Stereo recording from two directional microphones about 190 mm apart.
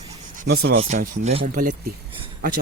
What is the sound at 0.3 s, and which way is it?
Speech, 60° right (ahead or behind).